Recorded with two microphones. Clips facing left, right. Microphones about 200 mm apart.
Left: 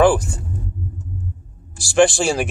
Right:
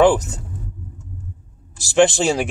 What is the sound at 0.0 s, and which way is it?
Rumble, 20° right (ahead or behind).